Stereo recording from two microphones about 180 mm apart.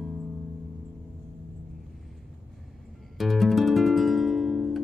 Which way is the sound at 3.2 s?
Centre (ahead or behind).